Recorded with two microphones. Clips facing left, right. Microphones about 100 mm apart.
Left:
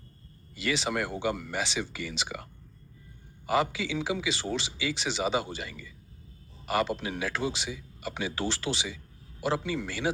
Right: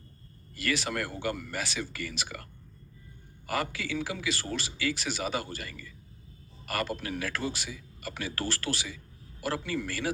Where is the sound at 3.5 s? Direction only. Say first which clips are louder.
Left 5 dB; 20° left (ahead or behind).